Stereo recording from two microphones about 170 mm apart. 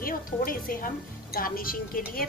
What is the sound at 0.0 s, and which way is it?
A woman's voice, 55° left (ahead or behind).